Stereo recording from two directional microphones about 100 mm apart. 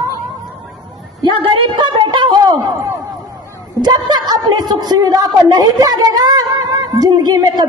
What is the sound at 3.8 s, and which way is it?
A woman's voice, 45° right (ahead or behind).